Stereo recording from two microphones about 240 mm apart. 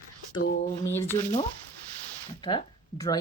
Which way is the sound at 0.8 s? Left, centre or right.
Centre.